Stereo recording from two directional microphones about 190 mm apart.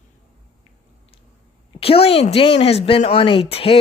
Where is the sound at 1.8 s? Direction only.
30° left (ahead or behind).